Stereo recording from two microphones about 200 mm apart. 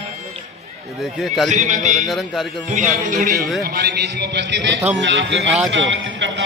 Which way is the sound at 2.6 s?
40° right (ahead or behind).